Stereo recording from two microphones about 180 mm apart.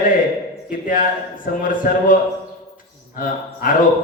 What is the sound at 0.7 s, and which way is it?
A man's voice, 50° left (ahead or behind).